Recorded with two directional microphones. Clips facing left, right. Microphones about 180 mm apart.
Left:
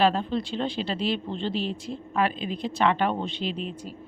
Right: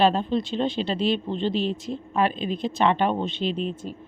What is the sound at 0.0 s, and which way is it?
Speech, 25° right (ahead or behind).